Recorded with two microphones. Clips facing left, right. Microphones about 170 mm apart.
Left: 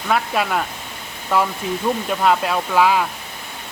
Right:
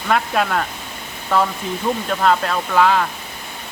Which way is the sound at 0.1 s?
5° left (ahead or behind).